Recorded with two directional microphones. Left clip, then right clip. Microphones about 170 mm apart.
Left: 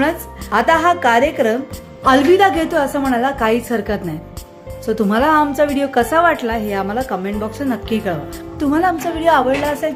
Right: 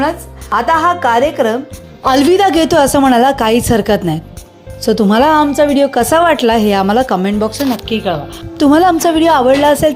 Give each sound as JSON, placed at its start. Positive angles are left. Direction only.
{"t": 0.0, "sound": "speech", "side_deg": 5}
{"t": 2.0, "sound": "a woman's voice", "side_deg": -40}
{"t": 7.9, "sound": "speech", "side_deg": 0}
{"t": 8.5, "sound": "a woman's voice", "side_deg": -45}